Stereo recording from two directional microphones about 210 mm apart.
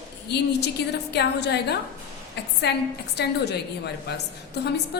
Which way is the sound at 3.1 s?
50° left (ahead or behind).